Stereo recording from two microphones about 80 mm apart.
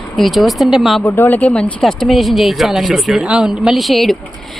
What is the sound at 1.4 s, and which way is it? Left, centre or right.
Speech, centre.